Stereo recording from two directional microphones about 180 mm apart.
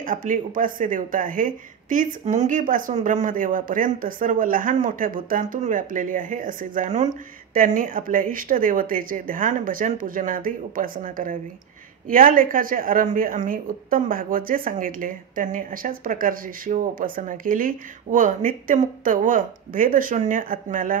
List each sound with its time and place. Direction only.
0.0 s a woman's voice: 45° right (ahead or behind)